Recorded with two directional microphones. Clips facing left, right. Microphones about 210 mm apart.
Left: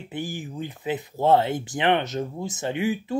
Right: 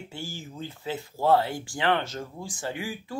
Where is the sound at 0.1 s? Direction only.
15° left (ahead or behind).